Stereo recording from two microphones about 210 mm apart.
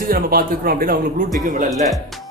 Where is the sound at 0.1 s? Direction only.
45° right (ahead or behind).